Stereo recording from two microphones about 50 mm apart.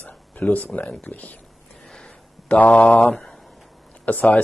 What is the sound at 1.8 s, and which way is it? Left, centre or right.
Sniff, centre.